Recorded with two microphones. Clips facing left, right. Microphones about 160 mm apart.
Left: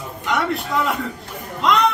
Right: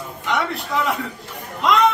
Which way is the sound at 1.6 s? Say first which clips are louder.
Right 1 dB; centre (ahead or behind).